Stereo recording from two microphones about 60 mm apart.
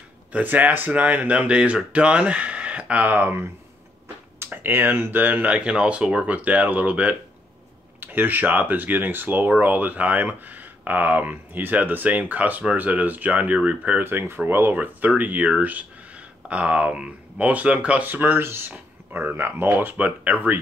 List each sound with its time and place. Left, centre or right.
0.3 s speech: right
8.0 s speech: right
14.0 s speech: right
14.8 s speech: right